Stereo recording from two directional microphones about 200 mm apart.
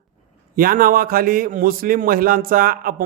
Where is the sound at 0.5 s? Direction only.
45° right (ahead or behind).